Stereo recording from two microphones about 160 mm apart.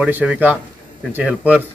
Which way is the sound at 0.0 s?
10° right (ahead or behind).